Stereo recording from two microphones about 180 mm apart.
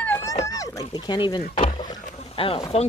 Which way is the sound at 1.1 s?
25° left (ahead or behind).